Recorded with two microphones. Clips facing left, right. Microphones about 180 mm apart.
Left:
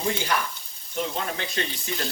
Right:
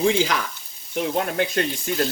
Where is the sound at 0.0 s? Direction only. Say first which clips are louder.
Right 6 dB; 90° right.